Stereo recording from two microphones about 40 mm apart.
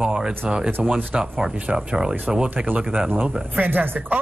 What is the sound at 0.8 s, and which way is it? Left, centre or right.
A man's voice, right.